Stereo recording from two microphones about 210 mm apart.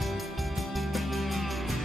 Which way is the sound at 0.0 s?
Centre (ahead or behind).